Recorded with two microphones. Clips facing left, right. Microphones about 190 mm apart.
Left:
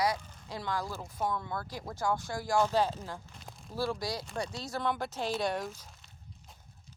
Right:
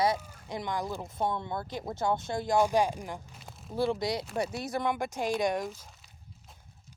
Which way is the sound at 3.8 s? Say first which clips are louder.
Right 5 dB; 20° right (ahead or behind).